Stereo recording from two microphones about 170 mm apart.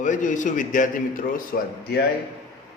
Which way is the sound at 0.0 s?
50° left (ahead or behind).